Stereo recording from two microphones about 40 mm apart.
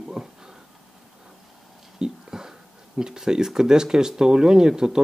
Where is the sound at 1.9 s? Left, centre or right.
Centre.